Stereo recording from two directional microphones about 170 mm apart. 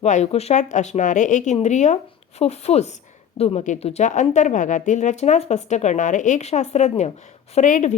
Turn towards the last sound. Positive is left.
turn(degrees=45)  # may be behind; listen again after turning